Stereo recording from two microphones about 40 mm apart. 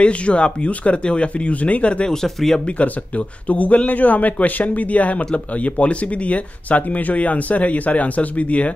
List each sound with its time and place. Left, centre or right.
0.0 s speech: left
2.0 s speech: centre
2.6 s speech: left